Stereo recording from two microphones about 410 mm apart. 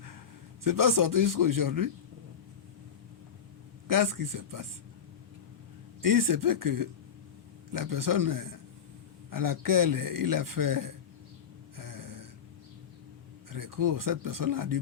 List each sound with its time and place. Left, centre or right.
0.6 s a man's voice: right
3.8 s a man's voice: right
6.0 s a man's voice: right
11.8 s a sound: right
13.5 s a man's voice: right